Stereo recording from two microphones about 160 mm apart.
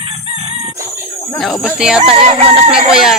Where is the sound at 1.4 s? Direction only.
Centre (ahead or behind).